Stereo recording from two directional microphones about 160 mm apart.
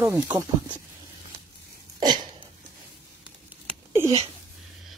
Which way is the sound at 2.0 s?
25° right (ahead or behind).